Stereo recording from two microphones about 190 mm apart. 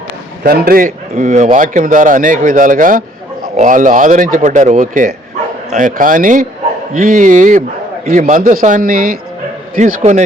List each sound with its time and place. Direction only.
0.4 s a man's voice: 55° right (ahead or behind)